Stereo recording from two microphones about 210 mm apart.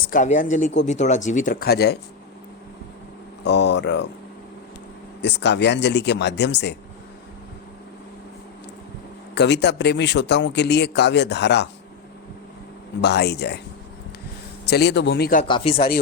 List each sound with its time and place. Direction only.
0.0 s speech: 40° left (ahead or behind)
3.4 s a man's voice: 55° left (ahead or behind)
5.2 s a man's voice: 55° left (ahead or behind)
9.3 s a man's voice: 55° left (ahead or behind)
13.0 s a man's voice: 55° left (ahead or behind)
14.6 s a man's voice: 50° left (ahead or behind)
15.4 s speech: 20° left (ahead or behind)